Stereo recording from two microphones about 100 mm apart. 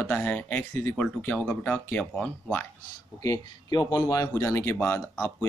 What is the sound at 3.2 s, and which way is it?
Speech, 35° left (ahead or behind).